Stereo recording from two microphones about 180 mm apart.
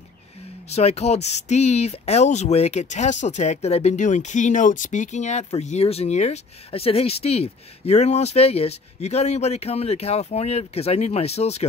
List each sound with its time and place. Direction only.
0.7 s speech: 35° left (ahead or behind)